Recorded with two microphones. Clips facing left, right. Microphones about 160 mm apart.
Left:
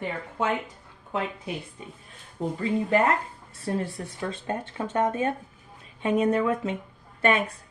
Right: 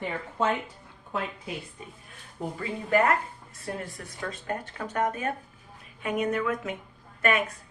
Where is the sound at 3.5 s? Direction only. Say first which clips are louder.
Left 7 dB; 30° left (ahead or behind).